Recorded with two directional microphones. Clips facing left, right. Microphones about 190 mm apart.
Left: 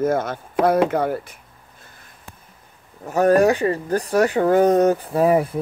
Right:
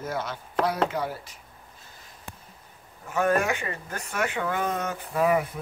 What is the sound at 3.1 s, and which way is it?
Speech, 40° left (ahead or behind).